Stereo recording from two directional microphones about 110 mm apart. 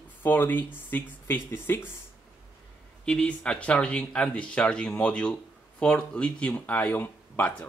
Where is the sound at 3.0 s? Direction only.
10° left (ahead or behind).